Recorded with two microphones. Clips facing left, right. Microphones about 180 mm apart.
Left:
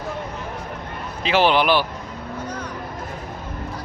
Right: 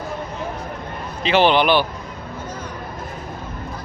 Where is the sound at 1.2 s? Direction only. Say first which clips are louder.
Right 2 dB; 5° left (ahead or behind).